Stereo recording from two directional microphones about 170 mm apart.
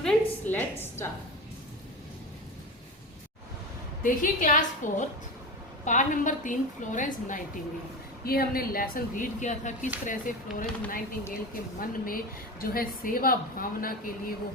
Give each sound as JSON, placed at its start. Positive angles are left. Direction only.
{"t": 0.0, "sound": "a sound", "side_deg": 5}
{"t": 4.0, "sound": "a woman's voice", "side_deg": 50}
{"t": 8.2, "sound": "a woman's voice", "side_deg": 60}